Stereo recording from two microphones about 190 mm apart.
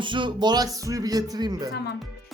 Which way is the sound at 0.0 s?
25° right (ahead or behind).